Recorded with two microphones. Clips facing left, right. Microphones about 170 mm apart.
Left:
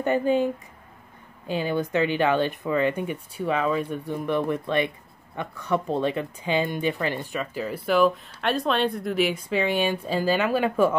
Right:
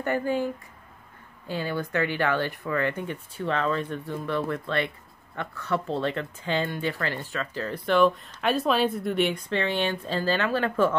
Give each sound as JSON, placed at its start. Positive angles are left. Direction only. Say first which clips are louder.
{"t": 0.0, "sound": "speech", "louder": "left 4 dB", "side_deg": 20}
{"t": 1.5, "sound": "speech", "louder": "left 4 dB", "side_deg": 20}